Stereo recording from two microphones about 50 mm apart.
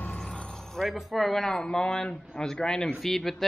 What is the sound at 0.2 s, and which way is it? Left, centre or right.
Vehicle, centre.